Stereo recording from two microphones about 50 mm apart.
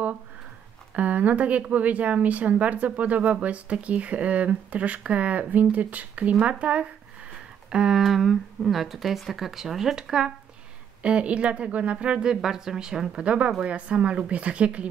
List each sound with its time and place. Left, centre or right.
0.9 s a woman's voice: right
7.7 s speech: centre
8.0 s a woman's voice: centre
13.2 s a woman's voice: right